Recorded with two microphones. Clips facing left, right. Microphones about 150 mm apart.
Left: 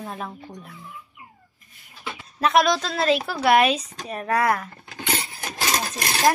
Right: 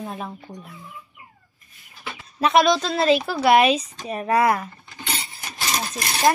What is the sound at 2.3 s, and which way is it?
Speech, centre (ahead or behind).